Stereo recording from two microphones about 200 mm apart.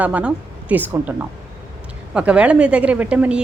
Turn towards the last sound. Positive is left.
turn(degrees=-5)  # may be behind; listen again after turning